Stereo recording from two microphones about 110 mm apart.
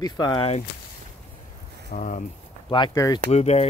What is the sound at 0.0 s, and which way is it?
Speech, 40° left (ahead or behind).